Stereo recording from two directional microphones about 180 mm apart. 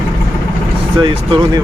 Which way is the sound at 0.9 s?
25° right (ahead or behind).